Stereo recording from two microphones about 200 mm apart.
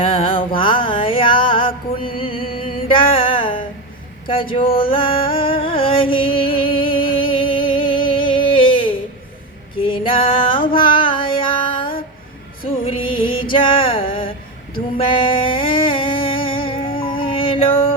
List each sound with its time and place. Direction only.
0.0 s music: 25° left (ahead or behind)
4.8 s music: 25° left (ahead or behind)
10.7 s a sound: 25° left (ahead or behind)
12.8 s music: 25° left (ahead or behind)